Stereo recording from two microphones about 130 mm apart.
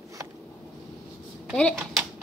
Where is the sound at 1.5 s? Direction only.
5° left (ahead or behind).